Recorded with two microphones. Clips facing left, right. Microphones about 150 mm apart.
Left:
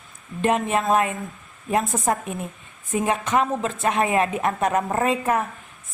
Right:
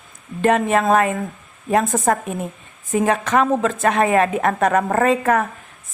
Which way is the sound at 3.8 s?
75° right (ahead or behind).